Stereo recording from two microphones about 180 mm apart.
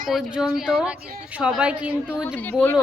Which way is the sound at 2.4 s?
10° left (ahead or behind).